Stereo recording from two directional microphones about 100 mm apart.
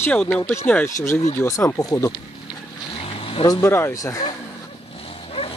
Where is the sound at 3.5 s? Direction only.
30° left (ahead or behind).